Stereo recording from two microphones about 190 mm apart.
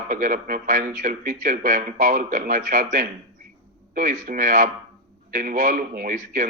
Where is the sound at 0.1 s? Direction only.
45° right (ahead or behind).